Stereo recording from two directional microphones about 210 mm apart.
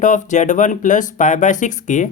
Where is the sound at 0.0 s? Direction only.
35° left (ahead or behind).